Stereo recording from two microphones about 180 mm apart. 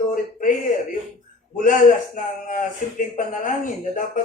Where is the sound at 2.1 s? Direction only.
45° left (ahead or behind).